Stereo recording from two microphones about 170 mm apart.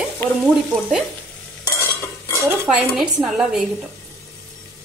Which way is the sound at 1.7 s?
15° left (ahead or behind).